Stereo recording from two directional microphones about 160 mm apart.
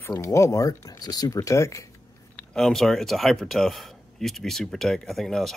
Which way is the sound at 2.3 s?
5° left (ahead or behind).